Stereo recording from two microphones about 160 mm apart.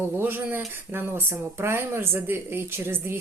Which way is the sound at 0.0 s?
15° right (ahead or behind).